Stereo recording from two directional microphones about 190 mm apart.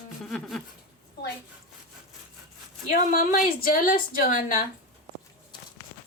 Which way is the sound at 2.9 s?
45° left (ahead or behind).